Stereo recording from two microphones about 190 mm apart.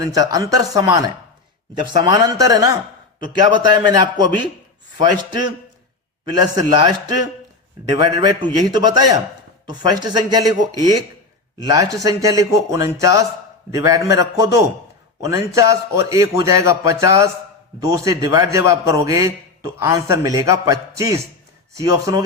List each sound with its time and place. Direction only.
0.0 s a man's voice: 20° right (ahead or behind)